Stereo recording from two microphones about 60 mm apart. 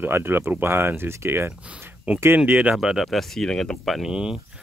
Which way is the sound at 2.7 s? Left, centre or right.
Centre.